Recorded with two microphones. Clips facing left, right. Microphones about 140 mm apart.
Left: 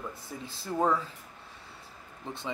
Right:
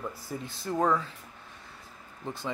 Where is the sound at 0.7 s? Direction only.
10° left (ahead or behind).